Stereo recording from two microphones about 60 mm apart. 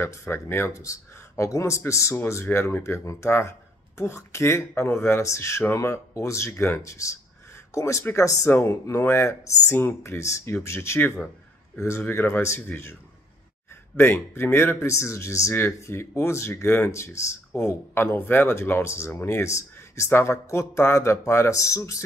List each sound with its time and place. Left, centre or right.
0.0 s speech: left
0.7 s speech: left
5.8 s speech: left
12.0 s speech: left
13.9 s speech: left